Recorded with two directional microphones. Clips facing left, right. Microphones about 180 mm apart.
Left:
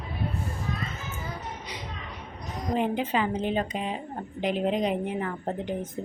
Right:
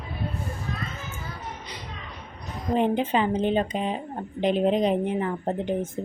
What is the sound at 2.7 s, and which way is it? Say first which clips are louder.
A woman's voice: right 4 dB; 30° right (ahead or behind).